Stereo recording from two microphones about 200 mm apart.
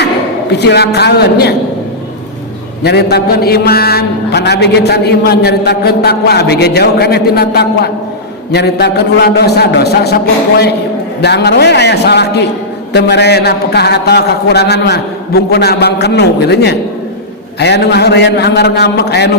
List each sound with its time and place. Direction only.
0.6 s a man's voice: 55° left (ahead or behind)
2.8 s a man's voice: 55° left (ahead or behind)
11.2 s a man's voice: 55° left (ahead or behind)